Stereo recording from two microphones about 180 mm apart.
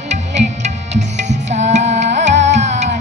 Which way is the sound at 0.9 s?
40° right (ahead or behind).